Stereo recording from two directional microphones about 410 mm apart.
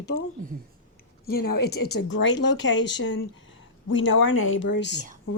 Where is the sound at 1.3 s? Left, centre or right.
Left.